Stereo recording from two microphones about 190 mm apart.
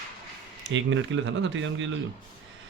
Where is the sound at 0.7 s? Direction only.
85° right.